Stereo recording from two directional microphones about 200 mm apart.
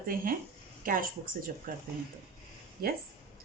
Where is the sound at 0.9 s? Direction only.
45° right (ahead or behind).